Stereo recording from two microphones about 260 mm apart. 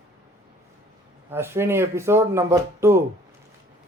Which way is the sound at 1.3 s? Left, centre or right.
Centre.